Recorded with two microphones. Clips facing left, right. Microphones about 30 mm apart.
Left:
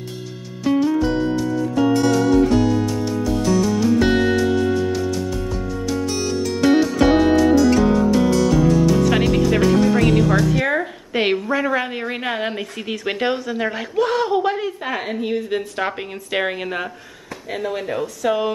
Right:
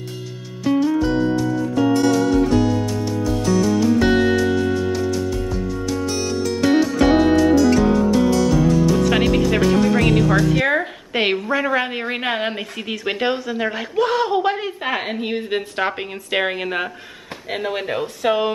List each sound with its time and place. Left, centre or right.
2.0 s music: centre
5.5 s music: centre
10.5 s a woman's voice: centre
15.8 s a woman's voice: centre
17.5 s speech: right